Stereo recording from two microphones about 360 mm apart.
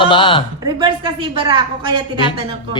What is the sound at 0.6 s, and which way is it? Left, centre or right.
A woman's voice, centre.